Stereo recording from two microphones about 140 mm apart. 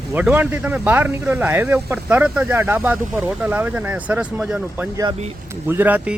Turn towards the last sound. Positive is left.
turn(degrees=-10)  # may be behind; listen again after turning